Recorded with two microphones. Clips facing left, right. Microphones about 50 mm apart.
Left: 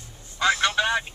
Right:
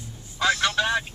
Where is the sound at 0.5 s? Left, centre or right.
Centre.